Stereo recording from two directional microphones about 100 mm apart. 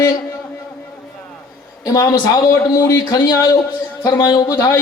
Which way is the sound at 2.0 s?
40° left (ahead or behind).